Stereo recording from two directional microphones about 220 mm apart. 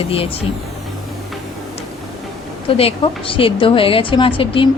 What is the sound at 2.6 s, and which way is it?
A woman's voice, 25° left (ahead or behind).